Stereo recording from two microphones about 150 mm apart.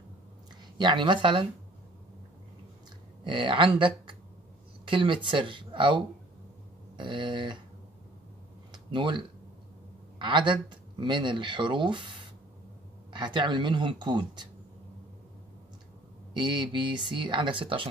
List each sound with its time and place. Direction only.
0.7 s speech: 30° right (ahead or behind)
3.3 s speech: 35° right (ahead or behind)
8.7 s a sound: 30° right (ahead or behind)
10.2 s speech: 30° right (ahead or behind)
16.3 s speech: 30° right (ahead or behind)